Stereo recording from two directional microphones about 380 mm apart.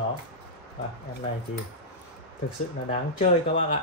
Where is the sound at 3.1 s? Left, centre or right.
Centre.